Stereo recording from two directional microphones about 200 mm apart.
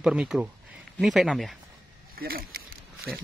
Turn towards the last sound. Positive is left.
turn(degrees=-50)  # may be behind; listen again after turning